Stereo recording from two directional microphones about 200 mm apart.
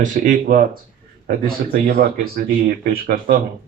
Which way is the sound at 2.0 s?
45° right (ahead or behind).